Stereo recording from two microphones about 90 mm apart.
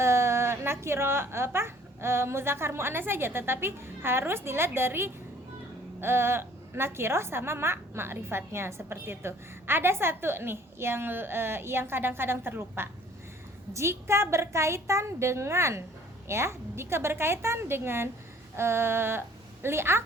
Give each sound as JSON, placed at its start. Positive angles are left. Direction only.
{"t": 0.0, "sound": "a woman's voice", "side_deg": -30}